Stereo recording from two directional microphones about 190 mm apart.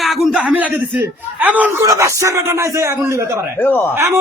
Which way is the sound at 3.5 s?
10° left (ahead or behind).